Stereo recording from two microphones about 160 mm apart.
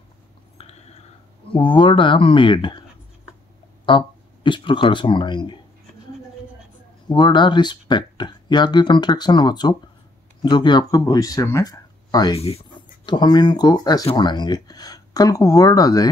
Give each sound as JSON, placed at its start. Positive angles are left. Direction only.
{"t": 0.6, "sound": "a sound", "side_deg": 40}
{"t": 1.5, "sound": "speech", "side_deg": 30}
{"t": 3.8, "sound": "speech", "side_deg": 30}
{"t": 7.1, "sound": "speech", "side_deg": 30}
{"t": 12.4, "sound": "speech", "side_deg": 40}